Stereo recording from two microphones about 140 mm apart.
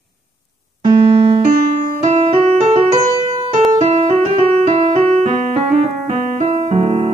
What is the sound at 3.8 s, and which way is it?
Music, 50° right (ahead or behind).